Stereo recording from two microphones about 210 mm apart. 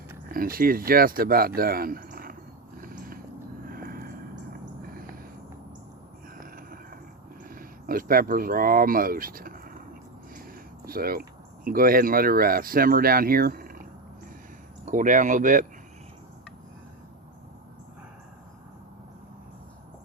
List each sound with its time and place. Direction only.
0.3 s speech: 45° right (ahead or behind)
2.8 s a sound: 45° right (ahead or behind)
7.4 s speech: 45° right (ahead or behind)
10.8 s speech: 45° right (ahead or behind)
14.8 s speech: 35° right (ahead or behind)